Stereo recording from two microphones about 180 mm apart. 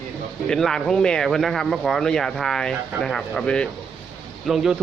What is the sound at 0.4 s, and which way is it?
Speech, 5° left (ahead or behind).